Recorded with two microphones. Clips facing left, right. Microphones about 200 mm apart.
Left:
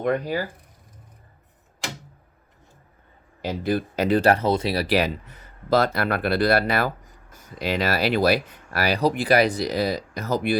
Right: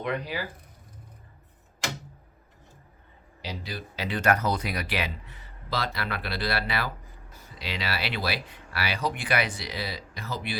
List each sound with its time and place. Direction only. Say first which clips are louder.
0.0 s speech: left 7 dB; 45° left (ahead or behind)
3.4 s speech: left 13 dB; 50° left (ahead or behind)